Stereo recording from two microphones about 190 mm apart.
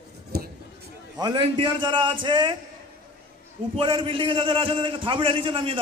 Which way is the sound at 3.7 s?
25° right (ahead or behind).